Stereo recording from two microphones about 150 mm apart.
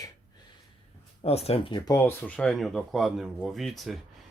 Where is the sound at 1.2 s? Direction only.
45° left (ahead or behind).